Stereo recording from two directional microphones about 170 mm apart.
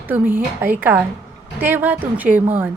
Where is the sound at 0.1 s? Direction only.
10° right (ahead or behind).